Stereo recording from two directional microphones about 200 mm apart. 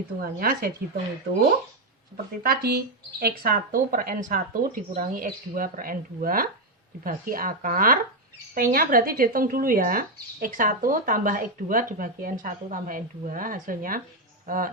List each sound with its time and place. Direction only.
0.2 s speech: 45° right (ahead or behind)
2.4 s speech: 50° right (ahead or behind)